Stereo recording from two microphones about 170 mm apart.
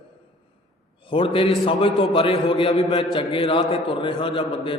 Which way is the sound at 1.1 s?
30° left (ahead or behind).